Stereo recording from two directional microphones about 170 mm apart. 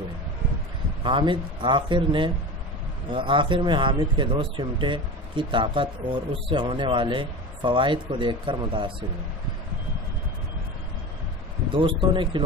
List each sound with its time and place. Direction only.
1.0 s speech: 30° right (ahead or behind)
11.7 s speech: 30° right (ahead or behind)